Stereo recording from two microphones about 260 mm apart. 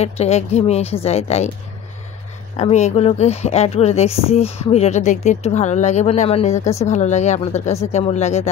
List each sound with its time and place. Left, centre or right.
0.0 s speech: left
2.5 s speech: left